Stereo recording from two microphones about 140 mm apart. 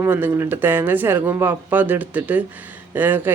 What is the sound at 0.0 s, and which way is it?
Speech, 15° right (ahead or behind).